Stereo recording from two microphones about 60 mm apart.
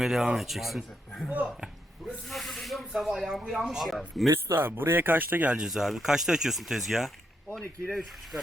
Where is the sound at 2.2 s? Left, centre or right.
Centre.